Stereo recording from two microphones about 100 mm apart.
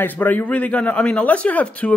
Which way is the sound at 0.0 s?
15° left (ahead or behind).